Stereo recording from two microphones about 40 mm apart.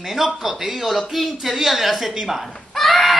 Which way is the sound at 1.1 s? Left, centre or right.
Centre.